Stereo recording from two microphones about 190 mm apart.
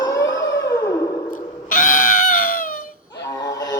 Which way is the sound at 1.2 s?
45° left (ahead or behind).